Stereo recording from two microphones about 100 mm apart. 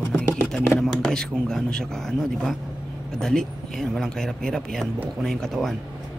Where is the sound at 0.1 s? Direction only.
20° left (ahead or behind).